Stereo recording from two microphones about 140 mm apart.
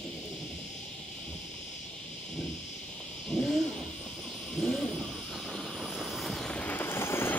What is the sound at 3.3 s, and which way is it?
Owl, 5° left (ahead or behind).